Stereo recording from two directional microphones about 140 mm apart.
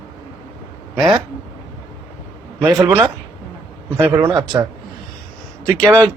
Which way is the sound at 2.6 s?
Centre (ahead or behind).